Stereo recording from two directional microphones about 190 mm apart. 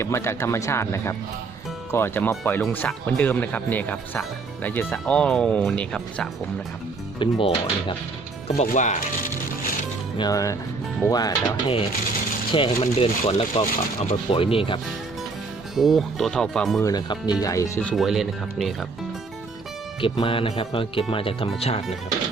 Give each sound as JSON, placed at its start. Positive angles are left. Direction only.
{"t": 0.0, "sound": "speech", "side_deg": 15}
{"t": 7.2, "sound": "speech", "side_deg": 25}
{"t": 10.2, "sound": "speech", "side_deg": 20}
{"t": 15.7, "sound": "speech", "side_deg": 0}
{"t": 16.8, "sound": "speech", "side_deg": 20}
{"t": 20.0, "sound": "speech", "side_deg": 25}